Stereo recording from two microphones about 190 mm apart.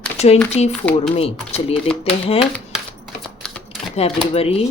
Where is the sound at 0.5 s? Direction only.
35° left (ahead or behind).